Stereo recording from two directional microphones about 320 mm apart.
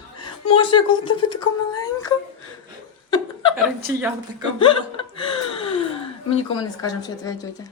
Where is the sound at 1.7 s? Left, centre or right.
Centre.